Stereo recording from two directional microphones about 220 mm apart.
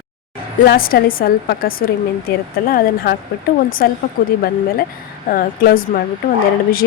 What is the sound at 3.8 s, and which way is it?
A woman's voice, 40° left (ahead or behind).